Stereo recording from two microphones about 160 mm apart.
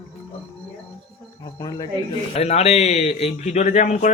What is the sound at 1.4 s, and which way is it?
Speech, 25° left (ahead or behind).